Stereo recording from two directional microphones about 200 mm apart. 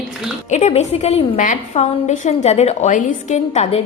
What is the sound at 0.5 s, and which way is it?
A woman's voice, 35° left (ahead or behind).